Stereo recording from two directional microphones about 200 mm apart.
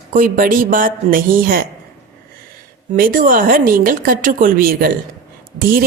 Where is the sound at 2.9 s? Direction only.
45° right (ahead or behind).